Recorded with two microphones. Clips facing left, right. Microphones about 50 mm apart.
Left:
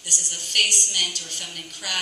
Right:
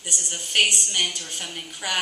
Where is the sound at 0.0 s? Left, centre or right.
Centre.